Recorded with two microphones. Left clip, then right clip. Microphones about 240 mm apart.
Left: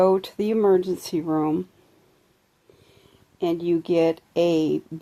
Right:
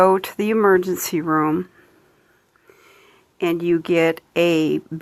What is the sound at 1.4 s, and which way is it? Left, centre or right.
Speech, right.